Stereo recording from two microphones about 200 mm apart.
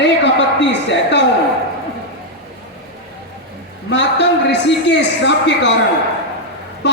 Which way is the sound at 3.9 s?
60° left (ahead or behind).